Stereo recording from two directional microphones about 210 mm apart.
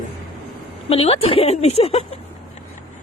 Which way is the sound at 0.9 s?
25° left (ahead or behind).